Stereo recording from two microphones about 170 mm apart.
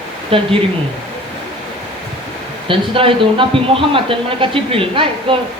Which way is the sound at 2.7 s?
30° right (ahead or behind).